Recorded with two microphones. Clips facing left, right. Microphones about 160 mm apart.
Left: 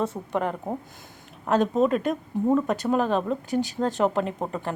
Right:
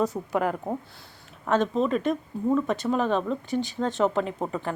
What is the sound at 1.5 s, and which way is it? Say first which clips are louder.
A woman's voice: left 2 dB; 10° left (ahead or behind).